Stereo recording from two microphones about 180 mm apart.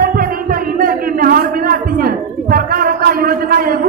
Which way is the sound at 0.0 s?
55° right (ahead or behind).